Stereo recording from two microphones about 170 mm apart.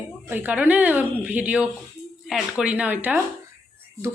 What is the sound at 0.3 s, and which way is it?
Speech, 10° right (ahead or behind).